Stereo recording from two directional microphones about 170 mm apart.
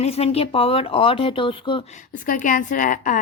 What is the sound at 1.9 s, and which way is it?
A woman's voice, 45° left (ahead or behind).